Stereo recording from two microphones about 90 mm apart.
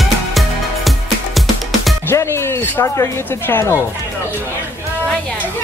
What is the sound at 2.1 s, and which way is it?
Speech, 30° left (ahead or behind).